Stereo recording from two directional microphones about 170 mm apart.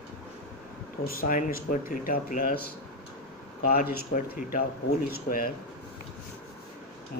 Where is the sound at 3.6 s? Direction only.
60° left (ahead or behind).